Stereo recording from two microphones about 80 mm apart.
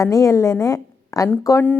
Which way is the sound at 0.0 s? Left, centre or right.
Left.